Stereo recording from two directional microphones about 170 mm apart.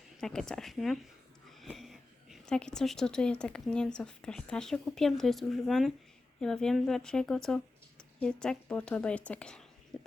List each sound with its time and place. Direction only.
0.2 s speech: 5° left (ahead or behind)
9.9 s whispering: 5° left (ahead or behind)